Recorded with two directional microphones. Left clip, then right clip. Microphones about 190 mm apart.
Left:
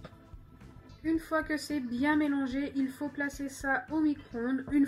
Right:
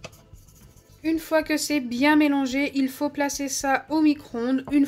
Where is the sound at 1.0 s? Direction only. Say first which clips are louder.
Right 8 dB; 40° right (ahead or behind).